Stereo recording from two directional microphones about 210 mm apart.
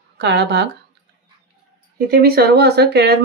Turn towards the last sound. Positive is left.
turn(degrees=-50)  # may be behind; listen again after turning